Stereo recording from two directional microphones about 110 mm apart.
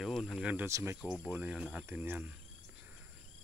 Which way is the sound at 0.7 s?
25° right (ahead or behind).